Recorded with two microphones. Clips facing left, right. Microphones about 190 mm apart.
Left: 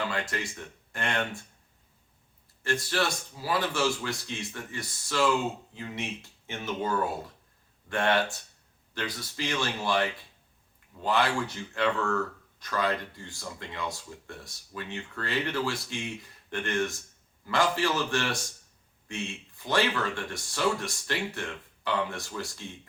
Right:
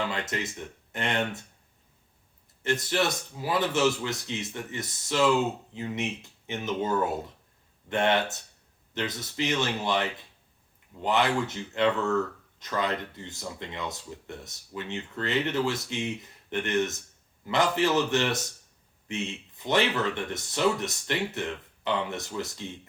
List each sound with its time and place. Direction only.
0.1 s speech: 20° right (ahead or behind)
2.6 s speech: 20° right (ahead or behind)